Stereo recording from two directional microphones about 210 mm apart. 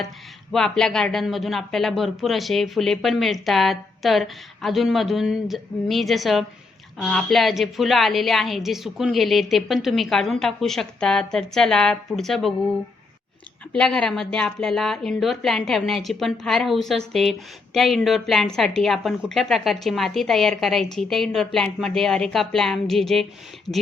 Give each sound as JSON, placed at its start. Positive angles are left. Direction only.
{"t": 0.5, "sound": "speech", "side_deg": 0}
{"t": 13.7, "sound": "speech", "side_deg": 5}